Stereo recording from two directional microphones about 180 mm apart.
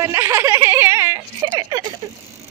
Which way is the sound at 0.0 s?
15° right (ahead or behind).